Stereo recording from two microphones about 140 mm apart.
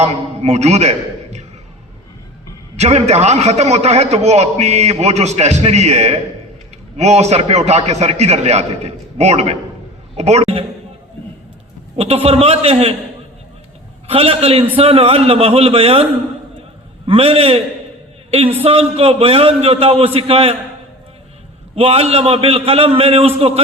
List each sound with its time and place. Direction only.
0.0 s a man's voice: 50° right (ahead or behind)
2.7 s a man's voice: 50° right (ahead or behind)
11.9 s a man's voice: 45° right (ahead or behind)
14.1 s a man's voice: 45° right (ahead or behind)
17.1 s a man's voice: 45° right (ahead or behind)
21.8 s a man's voice: 45° right (ahead or behind)